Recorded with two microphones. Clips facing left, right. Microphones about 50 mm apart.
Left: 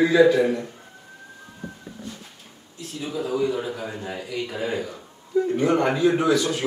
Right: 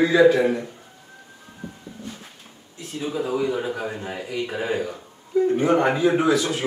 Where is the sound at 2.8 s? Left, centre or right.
Right.